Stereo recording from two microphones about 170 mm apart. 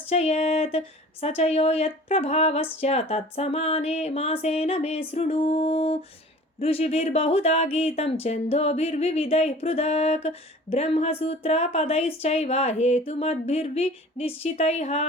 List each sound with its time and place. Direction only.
0.0 s music: 40° left (ahead or behind)